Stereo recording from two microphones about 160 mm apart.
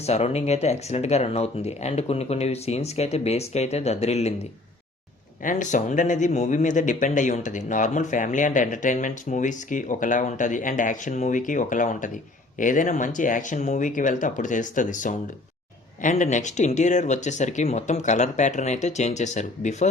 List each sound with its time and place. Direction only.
0.0 s speech: 40° left (ahead or behind)
5.4 s speech: 55° left (ahead or behind)